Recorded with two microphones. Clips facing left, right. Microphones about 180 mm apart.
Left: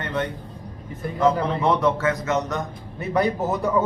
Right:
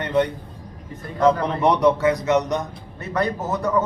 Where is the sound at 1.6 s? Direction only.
20° right (ahead or behind).